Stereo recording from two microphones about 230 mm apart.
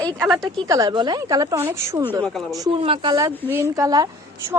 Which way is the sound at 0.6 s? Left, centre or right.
Centre.